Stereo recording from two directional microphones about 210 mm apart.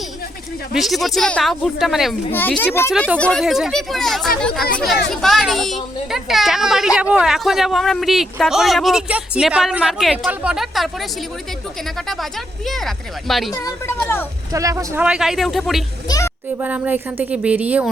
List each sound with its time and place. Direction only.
0.7 s speech: centre (ahead or behind)
12.0 s speech: centre (ahead or behind)
13.5 s speech: 15° left (ahead or behind)
14.5 s speech: 15° right (ahead or behind)
15.0 s speech: 5° right (ahead or behind)
16.0 s a sound: 15° left (ahead or behind)
16.6 s speech: 5° right (ahead or behind)